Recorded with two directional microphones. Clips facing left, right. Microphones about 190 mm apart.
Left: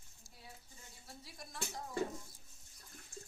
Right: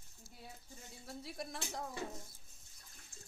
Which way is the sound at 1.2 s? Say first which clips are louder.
Right 2 dB; 65° right (ahead or behind).